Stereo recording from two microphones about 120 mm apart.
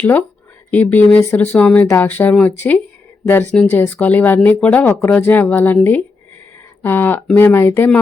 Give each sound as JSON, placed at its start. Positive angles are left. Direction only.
{"t": 0.0, "sound": "speech", "side_deg": 20}